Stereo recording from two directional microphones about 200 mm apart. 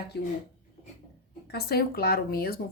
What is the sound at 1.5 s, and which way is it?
Speech, 50° left (ahead or behind).